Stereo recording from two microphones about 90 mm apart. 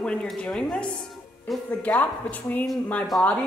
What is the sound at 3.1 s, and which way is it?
Speech, centre (ahead or behind).